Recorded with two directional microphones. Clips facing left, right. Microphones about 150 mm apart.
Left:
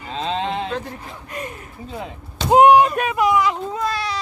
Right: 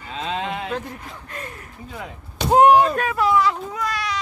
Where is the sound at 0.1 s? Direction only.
30° left (ahead or behind).